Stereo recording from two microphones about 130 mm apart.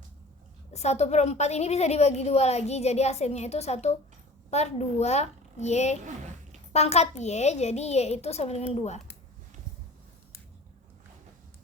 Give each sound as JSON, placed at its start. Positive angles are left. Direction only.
{"t": 0.7, "sound": "a woman's voice", "side_deg": 55}